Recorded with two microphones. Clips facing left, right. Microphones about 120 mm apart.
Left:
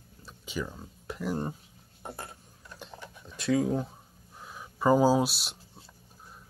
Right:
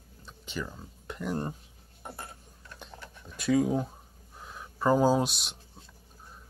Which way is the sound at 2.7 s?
5° left (ahead or behind).